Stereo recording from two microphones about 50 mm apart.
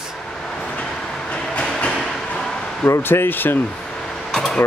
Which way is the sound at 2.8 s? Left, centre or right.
Left.